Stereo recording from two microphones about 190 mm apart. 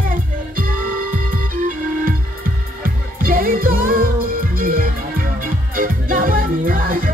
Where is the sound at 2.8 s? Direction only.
50° right (ahead or behind).